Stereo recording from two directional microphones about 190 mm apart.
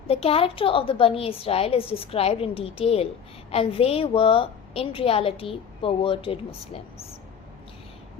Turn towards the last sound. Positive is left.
turn(degrees=30)  # may be behind; listen again after turning